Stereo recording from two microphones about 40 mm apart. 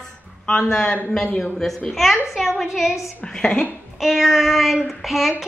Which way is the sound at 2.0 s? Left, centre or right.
Centre.